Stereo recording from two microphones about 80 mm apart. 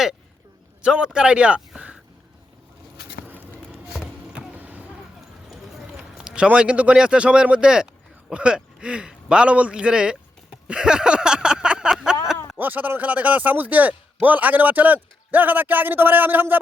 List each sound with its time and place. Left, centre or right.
0.8 s speech: centre
4.4 s basketball bounce: right
5.5 s clip-clop: centre
6.0 s a man's voice: centre
10.7 s a sound: centre
12.5 s speech: right